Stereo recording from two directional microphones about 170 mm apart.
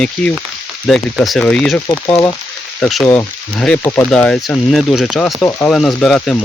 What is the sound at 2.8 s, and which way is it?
Speech, 5° left (ahead or behind).